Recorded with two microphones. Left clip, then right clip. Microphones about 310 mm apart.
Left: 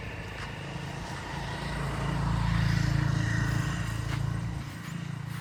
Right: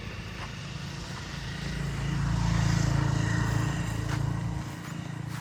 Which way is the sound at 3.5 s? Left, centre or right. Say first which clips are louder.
Right 1 dB; right.